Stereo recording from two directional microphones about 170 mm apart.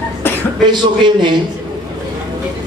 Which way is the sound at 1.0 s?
25° right (ahead or behind).